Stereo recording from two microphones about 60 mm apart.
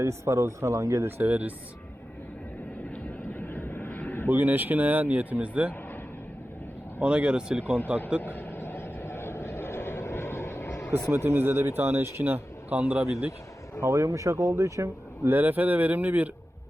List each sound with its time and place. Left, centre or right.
0.0 s speech: right
1.2 s speech: right
2.9 s vehicle: left
4.3 s speech: right
7.0 s speech: centre
8.2 s vehicle: left
11.1 s speech: right
12.7 s speech: right
13.8 s speech: right
15.3 s speech: right